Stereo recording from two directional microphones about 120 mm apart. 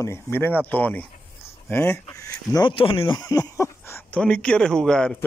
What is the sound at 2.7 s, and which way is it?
Speech, 50° left (ahead or behind).